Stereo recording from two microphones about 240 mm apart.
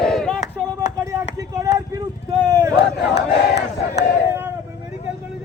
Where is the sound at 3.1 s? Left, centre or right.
Left.